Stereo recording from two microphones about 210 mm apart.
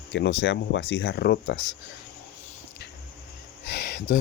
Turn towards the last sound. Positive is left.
turn(degrees=55)  # may be behind; listen again after turning